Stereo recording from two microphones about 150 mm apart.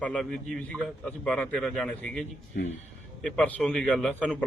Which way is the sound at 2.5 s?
75° left (ahead or behind).